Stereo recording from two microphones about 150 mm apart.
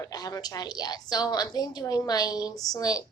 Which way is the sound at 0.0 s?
25° left (ahead or behind).